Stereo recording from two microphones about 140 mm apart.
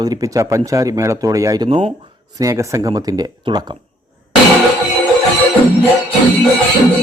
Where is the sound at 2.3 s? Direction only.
20° right (ahead or behind).